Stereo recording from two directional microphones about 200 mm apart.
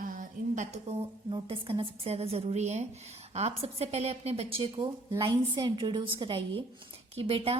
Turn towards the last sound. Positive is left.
turn(degrees=-30)  # may be behind; listen again after turning